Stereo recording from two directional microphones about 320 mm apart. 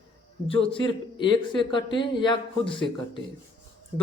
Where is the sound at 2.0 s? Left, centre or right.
Centre.